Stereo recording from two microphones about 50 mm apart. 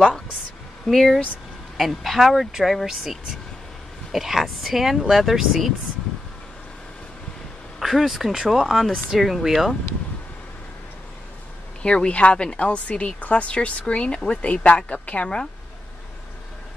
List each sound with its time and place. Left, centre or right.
0.8 s speech: centre
7.8 s speech: centre
11.8 s speech: centre